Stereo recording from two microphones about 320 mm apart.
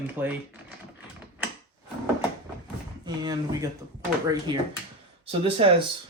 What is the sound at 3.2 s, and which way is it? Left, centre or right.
Speech, centre.